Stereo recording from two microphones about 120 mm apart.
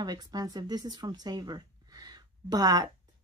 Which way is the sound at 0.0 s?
35° right (ahead or behind).